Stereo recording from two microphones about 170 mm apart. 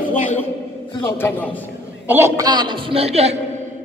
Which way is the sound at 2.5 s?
25° right (ahead or behind).